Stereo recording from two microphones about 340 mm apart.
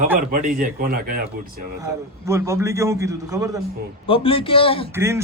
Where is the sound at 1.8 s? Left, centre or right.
Centre.